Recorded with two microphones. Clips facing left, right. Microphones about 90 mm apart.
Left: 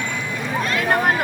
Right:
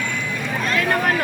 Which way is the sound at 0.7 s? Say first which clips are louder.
Left 1 dB; 25° left (ahead or behind).